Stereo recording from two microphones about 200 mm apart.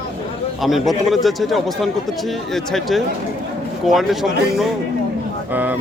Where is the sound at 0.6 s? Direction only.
Centre (ahead or behind).